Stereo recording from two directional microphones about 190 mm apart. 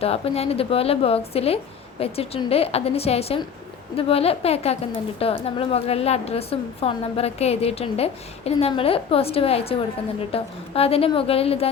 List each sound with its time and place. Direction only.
0.0 s a woman's voice: 30° left (ahead or behind)